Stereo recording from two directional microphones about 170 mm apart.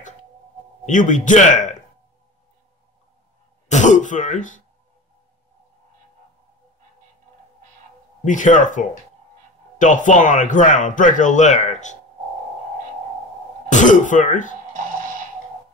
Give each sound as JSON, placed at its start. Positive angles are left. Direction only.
{"t": 0.8, "sound": "speech", "side_deg": 50}
{"t": 3.6, "sound": "throat clearing", "side_deg": 45}
{"t": 8.3, "sound": "speech", "side_deg": 50}
{"t": 13.7, "sound": "throat clearing", "side_deg": 45}